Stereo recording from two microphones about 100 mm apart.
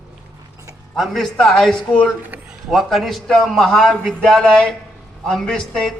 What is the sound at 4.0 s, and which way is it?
Speech, 15° right (ahead or behind).